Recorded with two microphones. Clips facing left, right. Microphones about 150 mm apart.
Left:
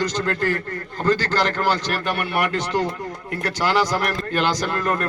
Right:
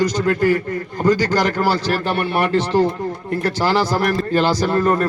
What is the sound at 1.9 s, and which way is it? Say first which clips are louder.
A man's voice: right 5 dB; 30° right (ahead or behind).